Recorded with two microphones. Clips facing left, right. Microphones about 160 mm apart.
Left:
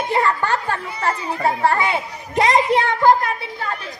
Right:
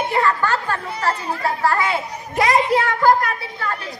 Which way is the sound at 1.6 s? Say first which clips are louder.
Left 1 dB; 25° left (ahead or behind).